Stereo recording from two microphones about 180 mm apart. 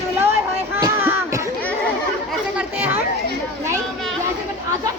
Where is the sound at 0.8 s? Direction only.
15° right (ahead or behind).